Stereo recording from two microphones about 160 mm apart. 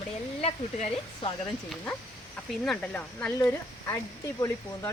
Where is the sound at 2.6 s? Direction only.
10° left (ahead or behind).